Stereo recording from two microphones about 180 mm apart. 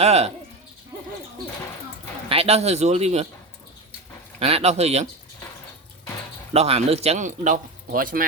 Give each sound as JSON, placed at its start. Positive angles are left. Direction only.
{"t": 0.0, "sound": "speech", "side_deg": -35}
{"t": 2.3, "sound": "speech", "side_deg": -35}
{"t": 4.4, "sound": "speech", "side_deg": -35}
{"t": 6.5, "sound": "speech", "side_deg": -35}